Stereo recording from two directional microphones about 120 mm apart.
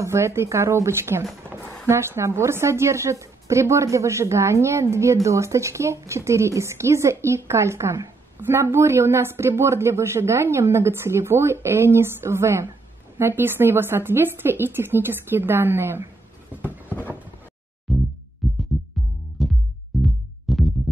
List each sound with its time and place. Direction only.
0.0 s a woman's voice: 25° right (ahead or behind)
17.9 s music: centre (ahead or behind)